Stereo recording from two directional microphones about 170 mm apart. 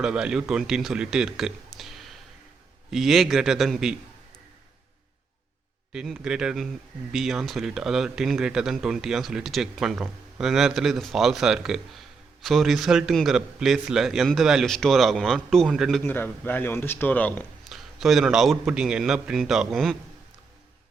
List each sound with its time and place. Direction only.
0.0 s speech: 5° right (ahead or behind)
5.9 s speech: 5° right (ahead or behind)
16.0 s speech: 10° left (ahead or behind)
17.7 s speech: centre (ahead or behind)